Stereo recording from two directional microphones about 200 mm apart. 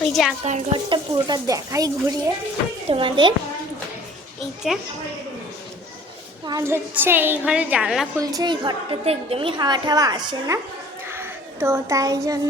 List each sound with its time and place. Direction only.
0.0 s speech: centre (ahead or behind)
0.4 s a woman's voice: 30° right (ahead or behind)
4.7 s a woman's voice: centre (ahead or behind)
6.4 s a woman's voice: 15° right (ahead or behind)
8.2 s a woman's voice: 20° right (ahead or behind)